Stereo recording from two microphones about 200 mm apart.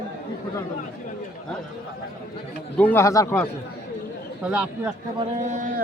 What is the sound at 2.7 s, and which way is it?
Speech, 10° left (ahead or behind).